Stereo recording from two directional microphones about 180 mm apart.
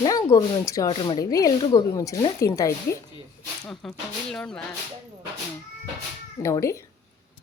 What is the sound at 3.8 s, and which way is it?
Speech, centre (ahead or behind).